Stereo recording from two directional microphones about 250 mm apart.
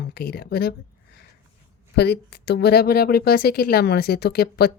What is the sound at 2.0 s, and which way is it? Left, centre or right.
Speech, left.